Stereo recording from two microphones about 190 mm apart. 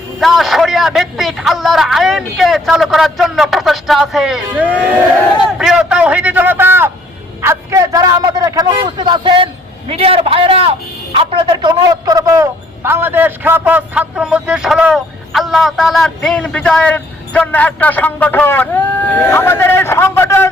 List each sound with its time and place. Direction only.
0.2 s a man's voice: centre (ahead or behind)